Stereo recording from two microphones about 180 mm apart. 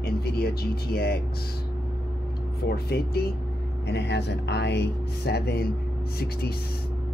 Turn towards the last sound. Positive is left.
turn(degrees=60)  # may be behind; listen again after turning